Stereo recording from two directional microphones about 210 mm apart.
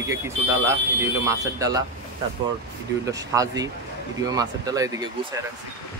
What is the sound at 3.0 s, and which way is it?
Speech, 15° right (ahead or behind).